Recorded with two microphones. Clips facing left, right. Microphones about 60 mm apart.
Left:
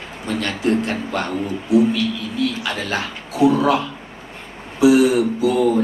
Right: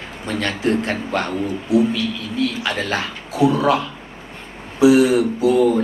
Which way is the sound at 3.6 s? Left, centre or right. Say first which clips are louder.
Even; right.